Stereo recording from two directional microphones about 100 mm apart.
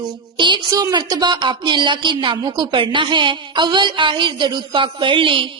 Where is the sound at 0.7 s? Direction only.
40° right (ahead or behind).